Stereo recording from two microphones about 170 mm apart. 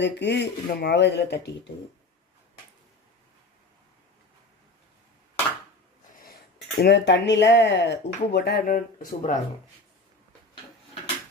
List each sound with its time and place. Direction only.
0.0 s speech: 90° left
6.8 s speech: 90° left; by 9.4 s 50° left (ahead or behind)